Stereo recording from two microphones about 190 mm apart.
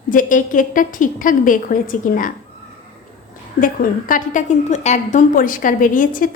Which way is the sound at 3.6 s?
45° left (ahead or behind).